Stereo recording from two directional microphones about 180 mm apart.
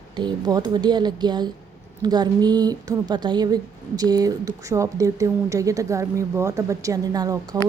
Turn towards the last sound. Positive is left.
turn(degrees=-20)  # may be behind; listen again after turning